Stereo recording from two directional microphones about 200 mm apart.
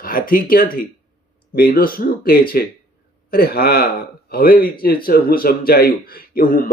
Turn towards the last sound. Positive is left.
turn(degrees=45)  # may be behind; listen again after turning